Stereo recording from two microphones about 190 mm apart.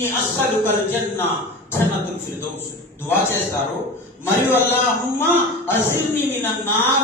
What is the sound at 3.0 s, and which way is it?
A man's voice, 15° left (ahead or behind).